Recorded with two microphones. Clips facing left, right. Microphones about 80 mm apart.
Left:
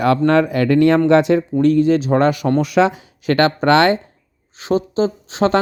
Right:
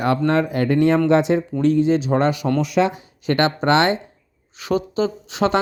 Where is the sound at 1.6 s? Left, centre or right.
Left.